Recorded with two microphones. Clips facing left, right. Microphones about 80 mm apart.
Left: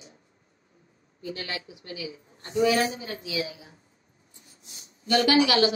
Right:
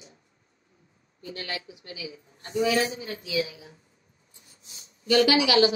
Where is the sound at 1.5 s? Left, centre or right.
Left.